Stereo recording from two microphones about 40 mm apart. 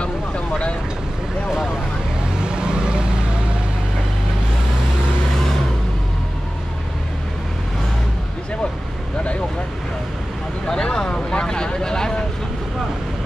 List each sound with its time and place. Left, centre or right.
2.4 s vehicle: right
10.7 s vehicle: centre